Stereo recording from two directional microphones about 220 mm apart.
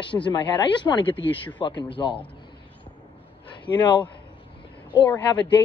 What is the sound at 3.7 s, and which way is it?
Speech, 20° left (ahead or behind).